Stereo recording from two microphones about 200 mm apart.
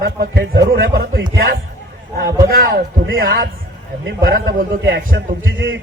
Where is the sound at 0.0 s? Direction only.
50° right (ahead or behind).